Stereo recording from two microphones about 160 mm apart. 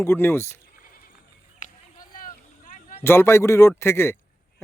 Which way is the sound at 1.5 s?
55° left (ahead or behind).